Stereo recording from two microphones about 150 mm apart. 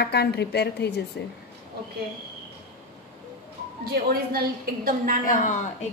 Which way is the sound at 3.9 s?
90° right.